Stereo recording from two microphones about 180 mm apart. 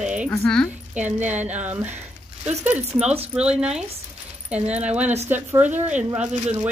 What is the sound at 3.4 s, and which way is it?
Speech, 5° right (ahead or behind).